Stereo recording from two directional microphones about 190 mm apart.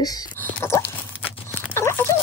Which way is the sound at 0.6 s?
15° left (ahead or behind).